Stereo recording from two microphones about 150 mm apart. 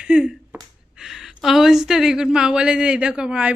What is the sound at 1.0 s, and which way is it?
Speech, centre (ahead or behind).